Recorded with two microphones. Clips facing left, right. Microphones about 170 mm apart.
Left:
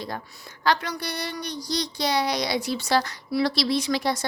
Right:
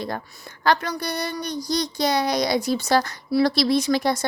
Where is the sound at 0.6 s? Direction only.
50° right (ahead or behind).